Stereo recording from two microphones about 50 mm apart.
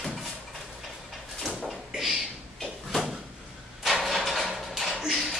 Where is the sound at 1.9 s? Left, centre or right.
Centre.